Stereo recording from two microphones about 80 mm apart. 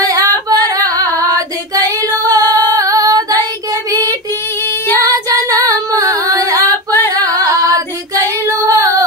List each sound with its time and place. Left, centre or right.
0.0 s singing: right
5.0 s female singing: right
7.2 s singing: right
8.5 s female singing: right